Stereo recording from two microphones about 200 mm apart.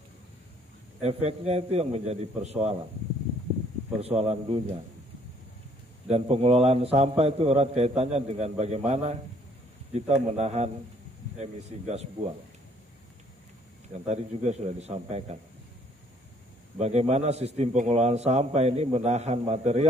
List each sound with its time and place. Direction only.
1.0 s a man's voice: 30° right (ahead or behind)
4.0 s a man's voice: 30° right (ahead or behind)
6.0 s a man's voice: 30° right (ahead or behind)
13.9 s a man's voice: 35° right (ahead or behind)
16.7 s a man's voice: 30° right (ahead or behind)